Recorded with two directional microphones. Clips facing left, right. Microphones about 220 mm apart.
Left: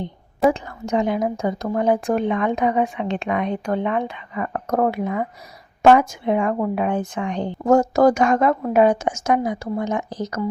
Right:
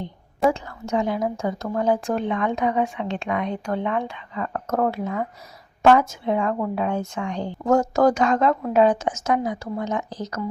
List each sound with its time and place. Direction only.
0.5 s a woman's voice: 15° left (ahead or behind)